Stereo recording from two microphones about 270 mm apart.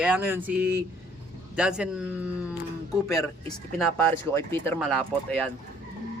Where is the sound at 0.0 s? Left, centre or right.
Centre.